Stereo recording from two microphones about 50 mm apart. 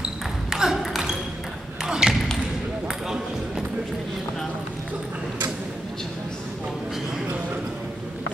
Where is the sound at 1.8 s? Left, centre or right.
Centre.